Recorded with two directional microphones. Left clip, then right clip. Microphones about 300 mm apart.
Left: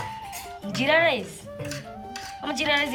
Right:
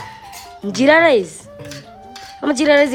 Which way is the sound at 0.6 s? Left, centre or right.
Right.